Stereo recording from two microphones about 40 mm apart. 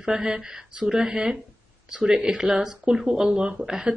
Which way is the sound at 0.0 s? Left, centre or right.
Centre.